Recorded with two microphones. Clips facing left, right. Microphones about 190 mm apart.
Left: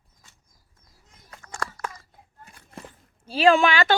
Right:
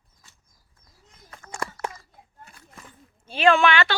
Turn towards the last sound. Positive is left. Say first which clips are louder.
# left 1 dB
turn(degrees=40)  # may be behind; listen again after turning